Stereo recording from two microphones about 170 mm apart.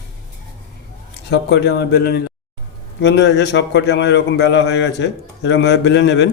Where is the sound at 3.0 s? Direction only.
85° left.